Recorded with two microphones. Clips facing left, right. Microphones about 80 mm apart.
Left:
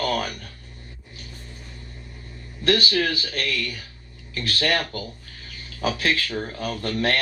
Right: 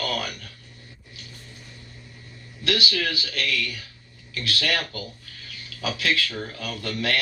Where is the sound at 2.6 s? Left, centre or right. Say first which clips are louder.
Left 4 dB; left.